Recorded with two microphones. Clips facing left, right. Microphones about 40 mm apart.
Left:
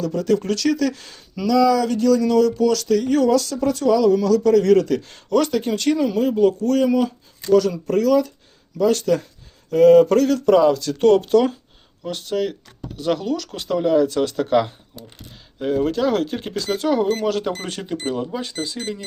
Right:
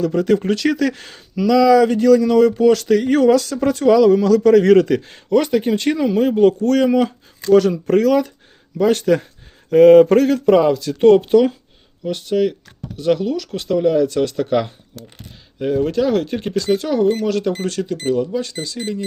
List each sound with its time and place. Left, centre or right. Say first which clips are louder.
0.0 s a man's voice: right 4 dB; right
4.9 s speech: right 2 dB; right
6.1 s a man's voice: right 3 dB; right
10.7 s speech: right 1 dB; centre
11.0 s speech: right 4 dB; right
12.0 s speech: right 5 dB; centre; by 18.4 s left